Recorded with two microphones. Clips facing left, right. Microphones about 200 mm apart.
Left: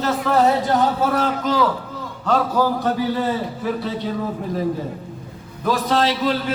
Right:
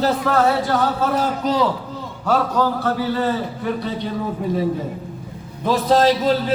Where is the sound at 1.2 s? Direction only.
35° right (ahead or behind).